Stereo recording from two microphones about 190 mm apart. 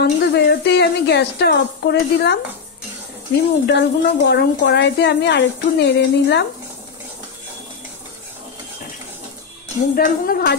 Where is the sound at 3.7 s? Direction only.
60° left (ahead or behind).